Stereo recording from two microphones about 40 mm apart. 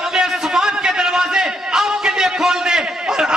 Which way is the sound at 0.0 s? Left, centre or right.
Centre.